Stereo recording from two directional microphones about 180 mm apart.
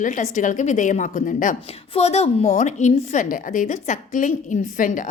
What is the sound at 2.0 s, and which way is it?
A woman's voice, 35° left (ahead or behind).